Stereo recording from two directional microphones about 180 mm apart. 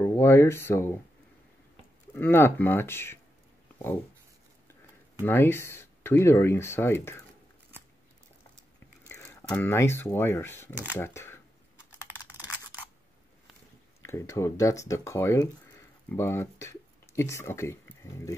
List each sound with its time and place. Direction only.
0.0 s speech: 15° left (ahead or behind)
2.1 s speech: 10° left (ahead or behind)
5.2 s speech: 10° left (ahead or behind)
9.0 s biting: 15° left (ahead or behind)
9.5 s speech: 10° left (ahead or behind)
14.0 s speech: 15° left (ahead or behind)